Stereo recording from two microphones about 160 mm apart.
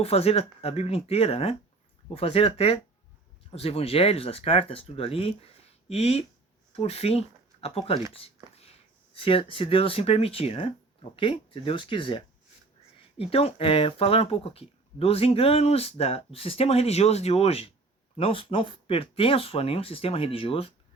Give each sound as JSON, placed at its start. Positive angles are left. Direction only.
{"t": 0.0, "sound": "speech", "side_deg": 40}
{"t": 9.1, "sound": "speech", "side_deg": 35}